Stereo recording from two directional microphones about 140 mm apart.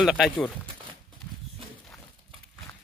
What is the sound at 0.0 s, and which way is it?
Speech, centre (ahead or behind).